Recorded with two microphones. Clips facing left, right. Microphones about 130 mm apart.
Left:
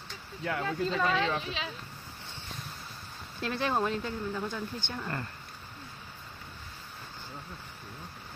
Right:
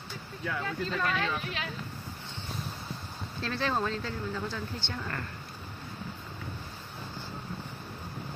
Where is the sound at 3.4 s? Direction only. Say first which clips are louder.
Left 1 dB; 15° left (ahead or behind).